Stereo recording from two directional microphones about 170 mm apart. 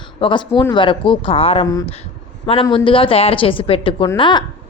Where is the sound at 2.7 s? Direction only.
30° left (ahead or behind).